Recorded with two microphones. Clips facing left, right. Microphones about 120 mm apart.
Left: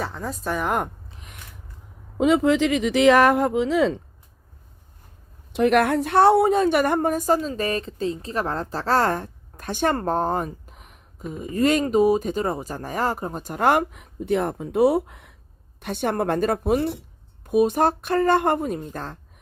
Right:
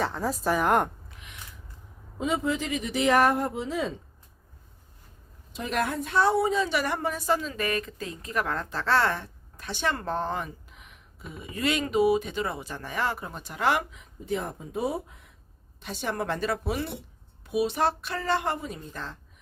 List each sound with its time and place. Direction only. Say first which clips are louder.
0.0 s a woman's voice: right 2 dB; centre (ahead or behind)
1.0 s a sound: left 3 dB; 30° left (ahead or behind)
2.1 s speech: left 9 dB; 80° left
5.5 s a woman's voice: left 10 dB; 65° left (ahead or behind)
15.8 s a woman's voice: left 7 dB; 55° left (ahead or behind)